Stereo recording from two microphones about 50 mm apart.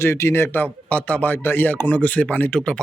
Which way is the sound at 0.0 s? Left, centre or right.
Left.